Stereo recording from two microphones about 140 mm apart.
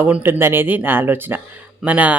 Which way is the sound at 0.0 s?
15° right (ahead or behind).